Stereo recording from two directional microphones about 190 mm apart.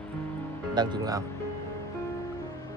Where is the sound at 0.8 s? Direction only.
20° right (ahead or behind).